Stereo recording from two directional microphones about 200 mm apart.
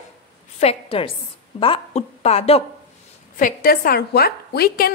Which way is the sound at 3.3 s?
45° left (ahead or behind).